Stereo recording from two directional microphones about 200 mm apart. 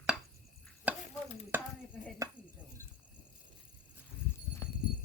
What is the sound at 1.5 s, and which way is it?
Chopping, 10° right (ahead or behind).